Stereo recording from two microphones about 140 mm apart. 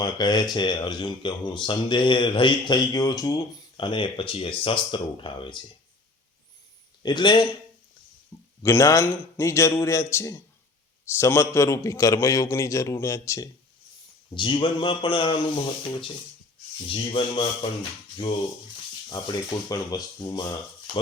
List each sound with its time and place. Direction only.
0.0 s speech: 30° left (ahead or behind)
7.0 s speech: 30° left (ahead or behind)
8.6 s a man's voice: 20° left (ahead or behind)
14.3 s speech: 35° left (ahead or behind)
19.1 s a man's voice: 30° left (ahead or behind)